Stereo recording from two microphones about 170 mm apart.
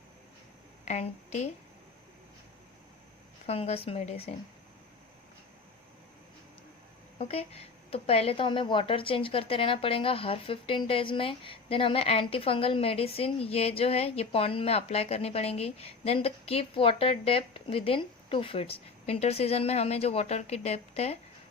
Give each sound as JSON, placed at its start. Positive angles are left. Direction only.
{"t": 0.9, "sound": "a woman's voice", "side_deg": 40}
{"t": 3.4, "sound": "a woman's voice", "side_deg": 35}
{"t": 7.2, "sound": "a woman's voice", "side_deg": 35}